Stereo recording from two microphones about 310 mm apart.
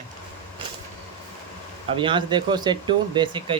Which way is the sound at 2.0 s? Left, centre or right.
Centre.